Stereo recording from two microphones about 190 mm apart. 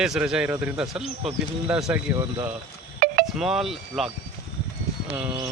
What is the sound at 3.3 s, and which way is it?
Speech, centre (ahead or behind).